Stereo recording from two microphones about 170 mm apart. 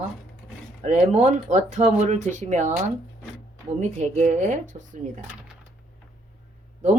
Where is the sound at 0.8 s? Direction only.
40° right (ahead or behind).